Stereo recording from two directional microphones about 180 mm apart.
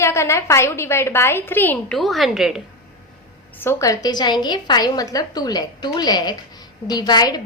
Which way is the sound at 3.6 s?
15° left (ahead or behind).